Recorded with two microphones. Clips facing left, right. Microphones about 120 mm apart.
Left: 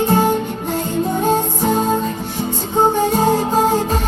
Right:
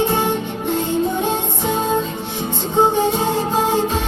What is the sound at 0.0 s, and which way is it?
Music, 45° left (ahead or behind).